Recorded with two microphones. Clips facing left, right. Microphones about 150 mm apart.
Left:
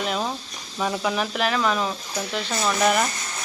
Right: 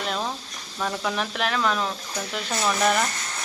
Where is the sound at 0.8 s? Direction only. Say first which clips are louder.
Left 3 dB; 5° left (ahead or behind).